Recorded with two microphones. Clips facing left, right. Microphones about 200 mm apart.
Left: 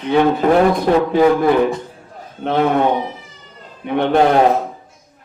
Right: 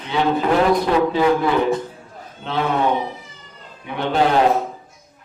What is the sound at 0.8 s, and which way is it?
A man's voice, 55° left (ahead or behind).